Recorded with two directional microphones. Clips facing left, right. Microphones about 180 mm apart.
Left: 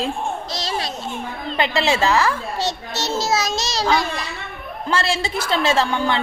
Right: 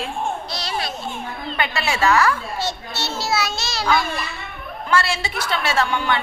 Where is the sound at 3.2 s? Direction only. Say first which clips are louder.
Left 1 dB; 40° left (ahead or behind).